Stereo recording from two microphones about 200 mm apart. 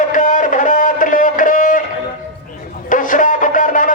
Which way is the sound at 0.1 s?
40° left (ahead or behind).